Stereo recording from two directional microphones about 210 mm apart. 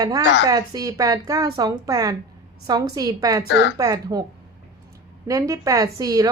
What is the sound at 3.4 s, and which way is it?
Speech, 55° left (ahead or behind).